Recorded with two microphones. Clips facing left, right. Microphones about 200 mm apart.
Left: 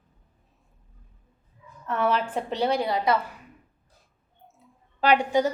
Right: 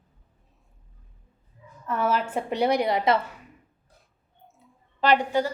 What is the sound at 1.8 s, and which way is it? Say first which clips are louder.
A woman's voice: even; centre (ahead or behind).